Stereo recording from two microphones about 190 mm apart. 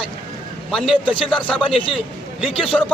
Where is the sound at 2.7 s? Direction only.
5° left (ahead or behind).